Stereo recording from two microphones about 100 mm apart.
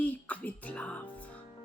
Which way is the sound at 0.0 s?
15° left (ahead or behind).